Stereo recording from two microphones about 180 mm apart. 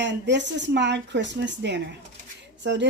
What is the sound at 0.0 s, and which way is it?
Speech, 80° right.